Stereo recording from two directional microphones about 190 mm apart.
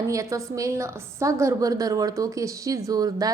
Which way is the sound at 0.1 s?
15° right (ahead or behind).